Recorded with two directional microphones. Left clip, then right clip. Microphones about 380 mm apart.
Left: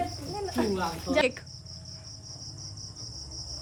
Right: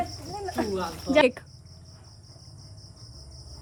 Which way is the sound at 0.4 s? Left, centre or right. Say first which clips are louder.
Even; centre.